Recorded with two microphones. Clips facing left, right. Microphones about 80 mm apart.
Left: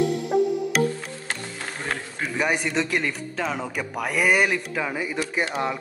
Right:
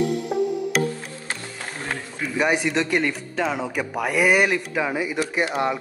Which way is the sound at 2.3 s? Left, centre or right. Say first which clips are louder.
Right 3 dB; centre.